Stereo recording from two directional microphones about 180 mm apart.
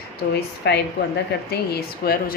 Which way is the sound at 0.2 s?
55° left (ahead or behind).